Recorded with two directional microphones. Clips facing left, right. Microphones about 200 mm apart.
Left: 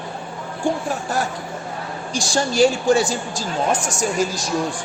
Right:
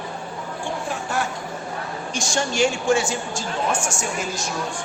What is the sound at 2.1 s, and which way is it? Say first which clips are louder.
A woman's voice: left 4 dB; 35° left (ahead or behind).